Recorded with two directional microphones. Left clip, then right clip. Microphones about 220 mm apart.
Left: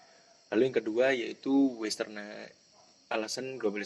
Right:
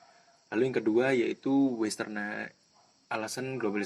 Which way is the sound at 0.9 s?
30° right (ahead or behind).